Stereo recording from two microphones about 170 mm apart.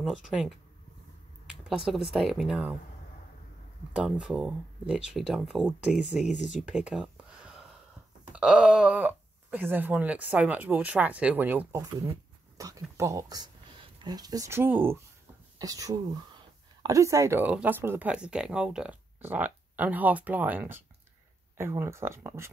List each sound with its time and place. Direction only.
0.0 s speech: 5° right (ahead or behind)
3.9 s speech: 5° right (ahead or behind)
6.3 s speech: 45° left (ahead or behind)
6.7 s a sound: 5° right (ahead or behind)
8.4 s speech: 5° right (ahead or behind)
12.5 s a sound: 20° right (ahead or behind)
12.9 s speech: 20° right (ahead or behind)